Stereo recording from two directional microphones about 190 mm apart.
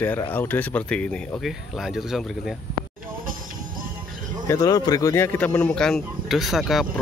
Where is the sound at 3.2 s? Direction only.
45° right (ahead or behind).